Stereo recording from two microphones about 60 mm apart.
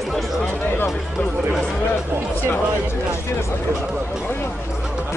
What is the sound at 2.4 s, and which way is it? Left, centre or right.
Speech, left.